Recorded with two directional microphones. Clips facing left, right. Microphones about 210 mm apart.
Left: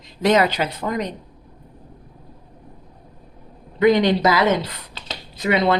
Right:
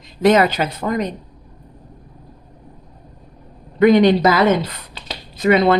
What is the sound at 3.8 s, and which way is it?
Speech, 55° right (ahead or behind).